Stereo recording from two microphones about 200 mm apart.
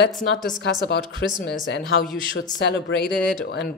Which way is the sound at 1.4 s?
45° left (ahead or behind).